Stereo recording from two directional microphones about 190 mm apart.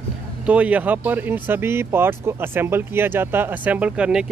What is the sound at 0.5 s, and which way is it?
Speech, 5° right (ahead or behind).